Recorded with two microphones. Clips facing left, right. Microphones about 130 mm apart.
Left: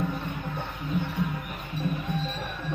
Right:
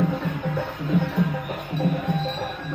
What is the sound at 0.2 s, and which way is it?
Music, 90° right.